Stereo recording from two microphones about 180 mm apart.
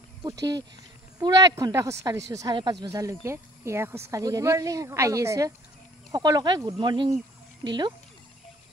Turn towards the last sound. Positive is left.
turn(degrees=-25)  # may be behind; listen again after turning